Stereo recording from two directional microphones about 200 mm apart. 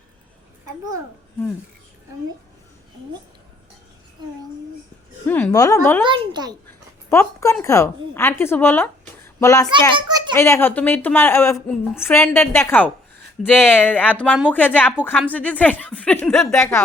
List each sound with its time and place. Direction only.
5.2 s a woman's voice: 10° left (ahead or behind)
6.1 s a child's voice: 20° right (ahead or behind)
7.1 s a woman's voice: 15° left (ahead or behind)
9.9 s a sound: 20° right (ahead or behind)
10.3 s a woman's voice: 15° left (ahead or behind)
16.5 s a woman's voice: 15° left (ahead or behind)